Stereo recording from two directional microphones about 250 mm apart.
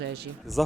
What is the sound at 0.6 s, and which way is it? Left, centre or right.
Speech, centre.